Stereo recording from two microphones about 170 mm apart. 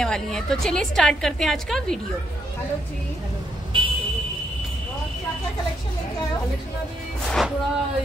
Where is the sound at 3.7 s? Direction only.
30° right (ahead or behind).